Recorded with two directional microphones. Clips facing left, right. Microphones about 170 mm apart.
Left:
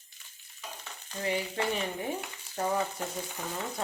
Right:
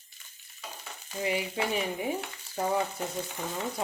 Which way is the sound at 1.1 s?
10° right (ahead or behind).